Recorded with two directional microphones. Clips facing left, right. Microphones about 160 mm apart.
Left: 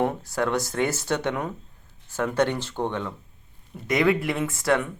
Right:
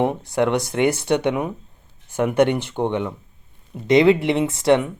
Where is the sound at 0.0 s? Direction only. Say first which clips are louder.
Right 5 dB; 20° right (ahead or behind).